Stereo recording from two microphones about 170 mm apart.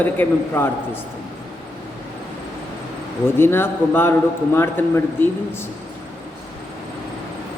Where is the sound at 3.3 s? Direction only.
15° left (ahead or behind).